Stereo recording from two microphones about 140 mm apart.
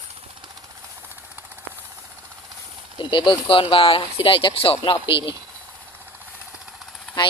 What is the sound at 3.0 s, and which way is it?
Speech, 35° left (ahead or behind).